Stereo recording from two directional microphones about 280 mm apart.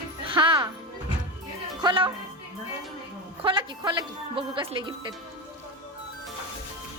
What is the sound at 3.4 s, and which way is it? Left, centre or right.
A man's voice, centre.